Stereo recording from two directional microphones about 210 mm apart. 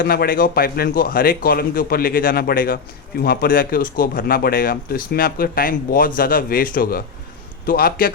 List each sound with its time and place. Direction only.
0.0 s speech: 45° left (ahead or behind)